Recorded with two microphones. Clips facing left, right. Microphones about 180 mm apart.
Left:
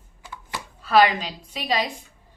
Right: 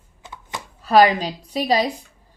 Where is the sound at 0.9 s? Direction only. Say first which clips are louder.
Right 4 dB; 35° right (ahead or behind).